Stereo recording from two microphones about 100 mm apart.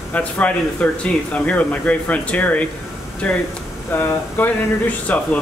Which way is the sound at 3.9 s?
20° left (ahead or behind).